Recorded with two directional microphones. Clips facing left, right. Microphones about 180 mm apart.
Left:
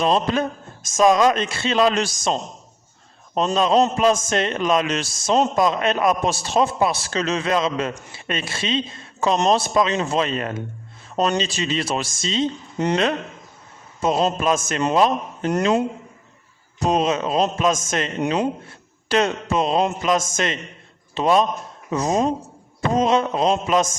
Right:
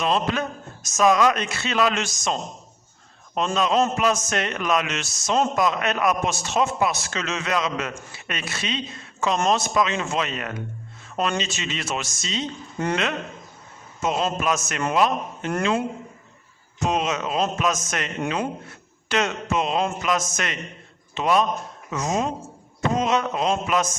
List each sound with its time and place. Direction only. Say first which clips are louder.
0.0 s a man's voice: left 4 dB; 35° left (ahead or behind)
12.8 s speech: left 4 dB; 20° left (ahead or behind)
14.0 s a man's voice: left 4 dB; 35° left (ahead or behind)
16.8 s a man's voice: left 4 dB; 35° left (ahead or behind)